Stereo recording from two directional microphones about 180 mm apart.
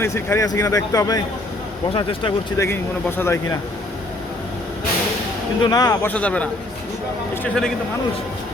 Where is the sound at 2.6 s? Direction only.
15° left (ahead or behind).